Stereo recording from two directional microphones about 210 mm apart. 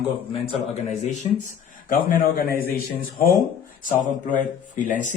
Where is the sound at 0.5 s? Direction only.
30° left (ahead or behind).